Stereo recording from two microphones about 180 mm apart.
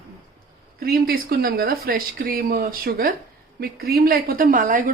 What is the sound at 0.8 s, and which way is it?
A woman's voice, 60° right (ahead or behind).